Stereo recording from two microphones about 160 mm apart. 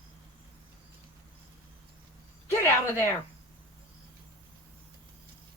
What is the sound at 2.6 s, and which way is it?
Speech, 15° left (ahead or behind).